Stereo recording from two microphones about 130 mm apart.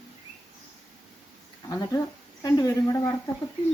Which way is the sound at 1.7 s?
25° left (ahead or behind).